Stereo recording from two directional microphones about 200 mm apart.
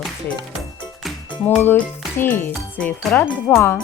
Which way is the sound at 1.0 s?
5° left (ahead or behind).